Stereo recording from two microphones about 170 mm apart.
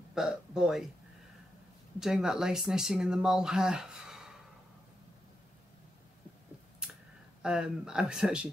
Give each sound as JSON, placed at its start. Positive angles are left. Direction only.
{"t": 0.1, "sound": "speech", "side_deg": -5}
{"t": 2.0, "sound": "speech", "side_deg": -5}
{"t": 6.8, "sound": "a sound", "side_deg": -5}
{"t": 7.4, "sound": "speech", "side_deg": -5}